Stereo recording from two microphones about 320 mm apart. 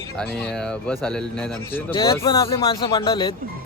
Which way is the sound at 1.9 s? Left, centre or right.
Centre.